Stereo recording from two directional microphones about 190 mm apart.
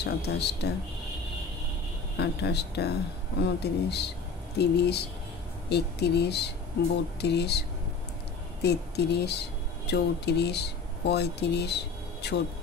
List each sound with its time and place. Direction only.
0.0 s speech: 60° left (ahead or behind)
2.1 s speech: 60° left (ahead or behind)
8.6 s speech: 60° left (ahead or behind)